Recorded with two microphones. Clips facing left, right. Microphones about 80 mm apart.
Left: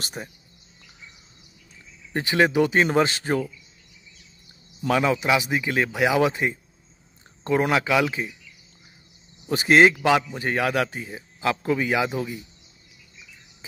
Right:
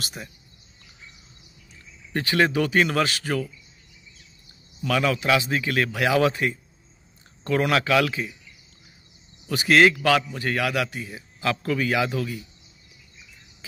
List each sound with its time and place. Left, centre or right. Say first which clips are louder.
0.0 s speech: left 2 dB; left
2.1 s a man's voice: left 2 dB; centre
4.8 s a man's voice: left 1 dB; left
9.5 s a man's voice: left 1 dB; left